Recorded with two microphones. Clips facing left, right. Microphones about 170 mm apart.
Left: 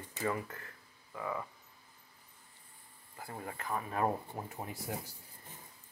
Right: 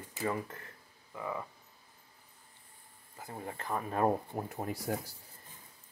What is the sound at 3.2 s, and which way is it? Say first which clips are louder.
Speech: right 1 dB; 20° right (ahead or behind).